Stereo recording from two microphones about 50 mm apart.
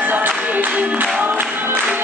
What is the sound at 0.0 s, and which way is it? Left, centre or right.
Music, right.